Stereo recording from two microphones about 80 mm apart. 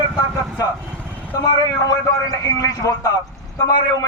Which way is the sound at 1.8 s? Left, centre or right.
Left.